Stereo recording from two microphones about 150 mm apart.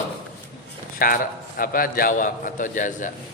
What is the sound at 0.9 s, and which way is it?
A man's voice, 70° left (ahead or behind).